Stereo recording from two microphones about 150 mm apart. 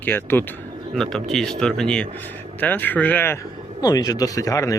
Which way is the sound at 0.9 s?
5° left (ahead or behind).